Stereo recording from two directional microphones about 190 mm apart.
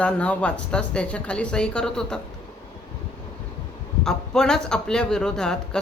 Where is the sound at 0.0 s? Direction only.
5° left (ahead or behind).